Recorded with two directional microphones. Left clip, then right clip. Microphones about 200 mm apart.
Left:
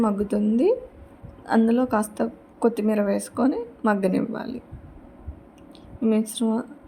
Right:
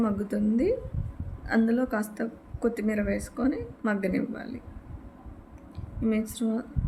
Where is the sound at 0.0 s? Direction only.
15° left (ahead or behind).